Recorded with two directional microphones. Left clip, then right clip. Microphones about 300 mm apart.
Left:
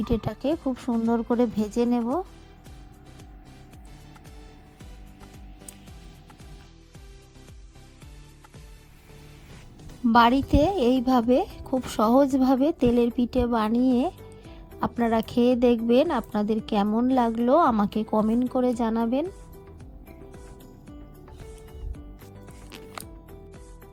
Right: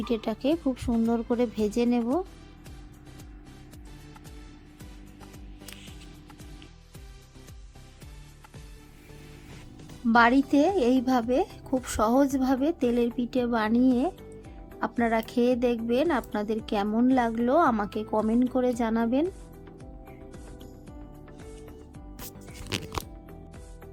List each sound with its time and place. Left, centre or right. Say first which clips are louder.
0.0 s a woman's voice: left 1 dB; left
10.1 s a woman's voice: left 2 dB; left